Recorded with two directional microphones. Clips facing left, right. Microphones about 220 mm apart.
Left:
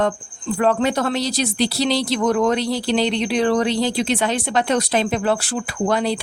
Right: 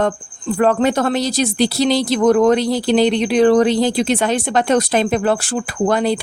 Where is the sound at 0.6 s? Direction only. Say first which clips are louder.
Right 3 dB; 50° right (ahead or behind).